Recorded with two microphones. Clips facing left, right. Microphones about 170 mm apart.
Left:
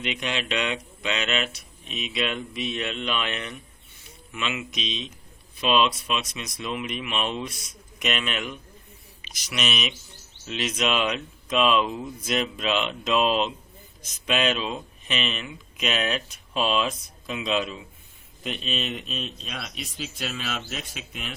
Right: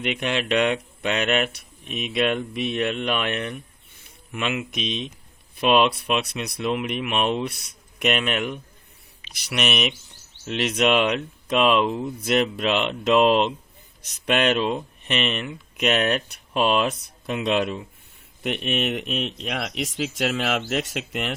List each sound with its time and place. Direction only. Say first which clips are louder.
0.0 s speech: right 4 dB; 55° right (ahead or behind); by 21.3 s 80° right